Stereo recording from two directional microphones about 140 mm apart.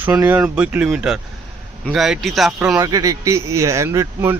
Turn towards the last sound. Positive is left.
turn(degrees=-20)  # may be behind; listen again after turning